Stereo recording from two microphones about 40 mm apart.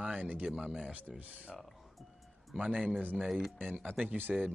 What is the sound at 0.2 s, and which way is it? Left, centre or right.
Speech, right.